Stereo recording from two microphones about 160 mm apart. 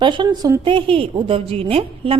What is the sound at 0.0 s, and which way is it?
A woman's voice, 30° right (ahead or behind).